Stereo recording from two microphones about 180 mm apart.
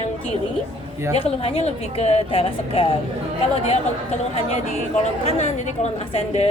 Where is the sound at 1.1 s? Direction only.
30° left (ahead or behind).